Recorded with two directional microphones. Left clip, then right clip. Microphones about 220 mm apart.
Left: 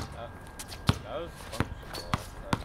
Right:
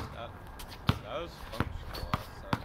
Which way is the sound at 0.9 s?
20° left (ahead or behind).